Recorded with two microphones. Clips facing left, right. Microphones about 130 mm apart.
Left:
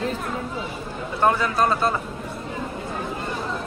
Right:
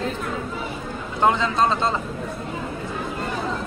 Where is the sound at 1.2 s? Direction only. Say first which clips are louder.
Right 1 dB; 20° right (ahead or behind).